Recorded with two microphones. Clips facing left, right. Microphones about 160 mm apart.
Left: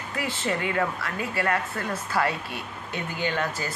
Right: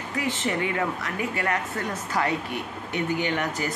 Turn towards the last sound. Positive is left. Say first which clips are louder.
# right 1 dB
turn(degrees=-20)  # may be behind; listen again after turning